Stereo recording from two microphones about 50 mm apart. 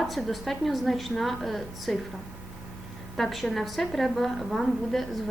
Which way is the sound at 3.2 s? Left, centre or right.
Centre.